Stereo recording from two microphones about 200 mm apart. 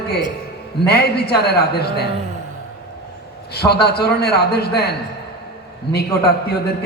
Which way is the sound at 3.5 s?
55° left (ahead or behind).